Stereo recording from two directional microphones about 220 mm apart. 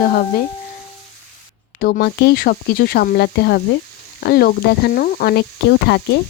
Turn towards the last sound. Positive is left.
turn(degrees=50)  # may be behind; listen again after turning